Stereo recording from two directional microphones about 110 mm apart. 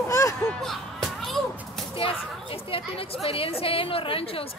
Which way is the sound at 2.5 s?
60° left (ahead or behind).